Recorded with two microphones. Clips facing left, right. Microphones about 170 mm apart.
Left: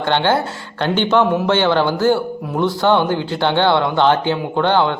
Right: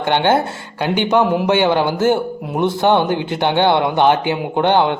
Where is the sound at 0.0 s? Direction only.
15° right (ahead or behind).